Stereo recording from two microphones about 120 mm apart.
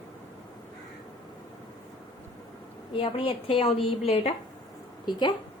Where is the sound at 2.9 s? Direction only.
50° left (ahead or behind).